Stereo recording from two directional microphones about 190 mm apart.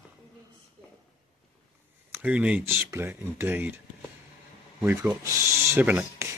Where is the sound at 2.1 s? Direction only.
10° right (ahead or behind).